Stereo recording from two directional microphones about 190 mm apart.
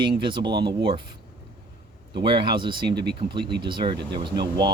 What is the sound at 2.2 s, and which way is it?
Speech, 25° right (ahead or behind).